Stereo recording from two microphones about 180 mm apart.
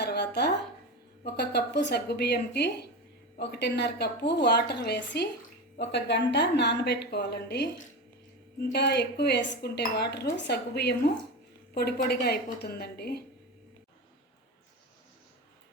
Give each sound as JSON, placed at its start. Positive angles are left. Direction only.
{"t": 0.0, "sound": "a sound", "side_deg": 70}
{"t": 1.2, "sound": "a woman's voice", "side_deg": 65}
{"t": 8.7, "sound": "a woman's voice", "side_deg": 70}